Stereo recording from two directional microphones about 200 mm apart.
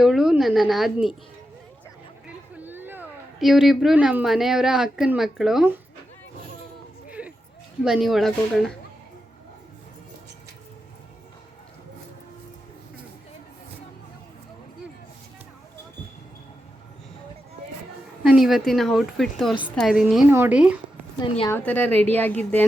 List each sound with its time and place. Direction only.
0.0 s a woman's voice: centre (ahead or behind)
2.6 s speech: 10° right (ahead or behind)
7.1 s a sound: 5° right (ahead or behind)
7.8 s a woman's voice: centre (ahead or behind)
18.2 s a woman's voice: centre (ahead or behind)
21.2 s a woman's voice: 20° left (ahead or behind)
21.6 s a woman's voice: 10° left (ahead or behind)